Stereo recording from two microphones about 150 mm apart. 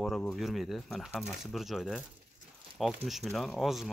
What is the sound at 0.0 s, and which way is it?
Speech, 5° left (ahead or behind).